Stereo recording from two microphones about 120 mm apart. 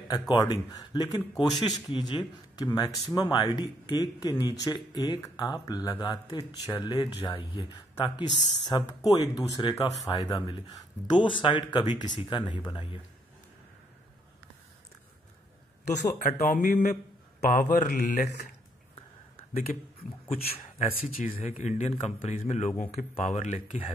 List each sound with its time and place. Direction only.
0.3 s speech: 35° left (ahead or behind)
15.9 s speech: 90° left
19.7 s speech: 90° left